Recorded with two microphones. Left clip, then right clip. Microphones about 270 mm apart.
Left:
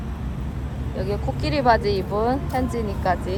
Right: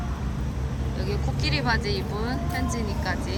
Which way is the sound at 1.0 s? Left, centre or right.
Centre.